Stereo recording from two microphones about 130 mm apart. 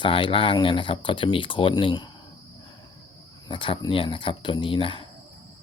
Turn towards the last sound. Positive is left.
turn(degrees=40)  # may be behind; listen again after turning